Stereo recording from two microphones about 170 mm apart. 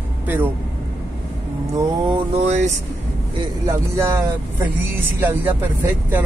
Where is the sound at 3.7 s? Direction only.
15° right (ahead or behind).